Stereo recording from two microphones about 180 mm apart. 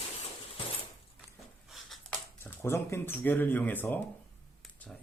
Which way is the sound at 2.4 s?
15° left (ahead or behind).